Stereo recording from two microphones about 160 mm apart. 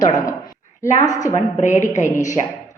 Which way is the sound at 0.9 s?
50° left (ahead or behind).